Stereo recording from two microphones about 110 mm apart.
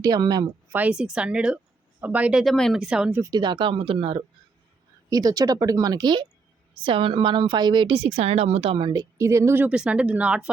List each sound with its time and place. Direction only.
0.0 s speech: 35° right (ahead or behind)
0.7 s speech: 15° right (ahead or behind)
2.4 s speech: 5° left (ahead or behind)
3.2 s speech: 35° right (ahead or behind)
5.0 s speech: 35° right (ahead or behind)
6.8 s speech: 50° right (ahead or behind)
8.9 s speech: 30° right (ahead or behind)
9.6 s speech: 10° right (ahead or behind)